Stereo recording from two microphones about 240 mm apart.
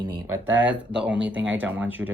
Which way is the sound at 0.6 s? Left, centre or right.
Centre.